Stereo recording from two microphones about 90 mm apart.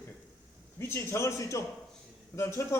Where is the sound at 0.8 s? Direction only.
30° left (ahead or behind).